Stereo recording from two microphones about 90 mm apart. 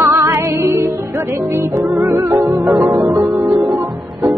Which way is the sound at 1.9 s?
40° right (ahead or behind).